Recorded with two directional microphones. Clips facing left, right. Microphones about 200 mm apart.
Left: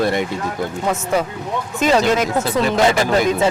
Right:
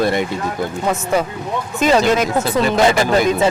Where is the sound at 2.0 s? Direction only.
5° right (ahead or behind).